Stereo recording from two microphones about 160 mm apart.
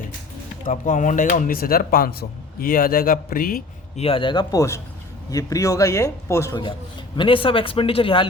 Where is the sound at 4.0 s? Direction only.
35° left (ahead or behind); by 6.5 s 15° left (ahead or behind).